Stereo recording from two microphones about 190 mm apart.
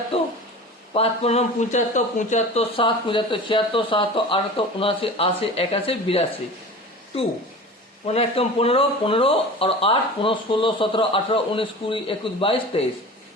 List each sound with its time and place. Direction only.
0.1 s speech: 30° left (ahead or behind)